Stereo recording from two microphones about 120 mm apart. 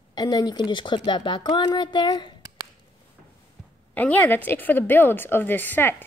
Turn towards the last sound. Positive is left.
turn(degrees=15)  # may be behind; listen again after turning